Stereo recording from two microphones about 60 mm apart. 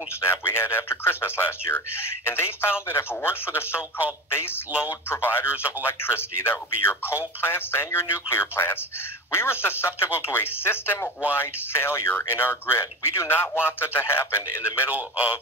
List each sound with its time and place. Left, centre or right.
0.2 s speech: left
12.7 s speech: left